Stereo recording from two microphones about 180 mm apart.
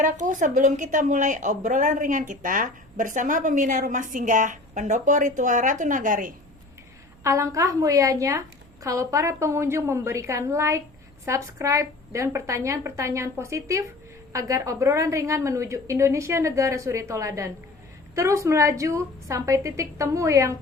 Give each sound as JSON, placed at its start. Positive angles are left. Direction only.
{"t": 0.0, "sound": "a woman's voice", "side_deg": -45}
{"t": 7.3, "sound": "a woman's voice", "side_deg": -20}